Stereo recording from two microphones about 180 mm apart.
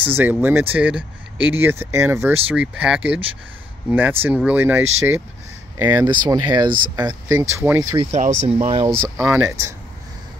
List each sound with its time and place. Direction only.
0.0 s speech: 10° right (ahead or behind)
5.9 s speech: 20° right (ahead or behind)
8.1 s speech: 40° right (ahead or behind)
8.6 s speech: 30° right (ahead or behind)
9.2 s speech: 15° right (ahead or behind)